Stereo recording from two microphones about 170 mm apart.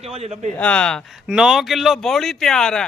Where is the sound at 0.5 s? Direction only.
5° left (ahead or behind).